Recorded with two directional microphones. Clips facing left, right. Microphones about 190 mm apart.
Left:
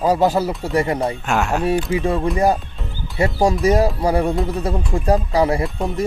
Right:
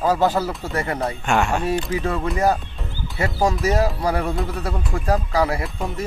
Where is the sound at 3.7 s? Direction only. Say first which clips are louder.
Left 4 dB; 25° left (ahead or behind).